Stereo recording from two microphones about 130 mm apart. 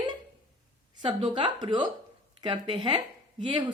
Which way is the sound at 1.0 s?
40° right (ahead or behind).